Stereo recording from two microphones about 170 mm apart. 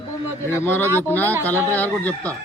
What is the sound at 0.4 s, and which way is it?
Speech, 15° left (ahead or behind).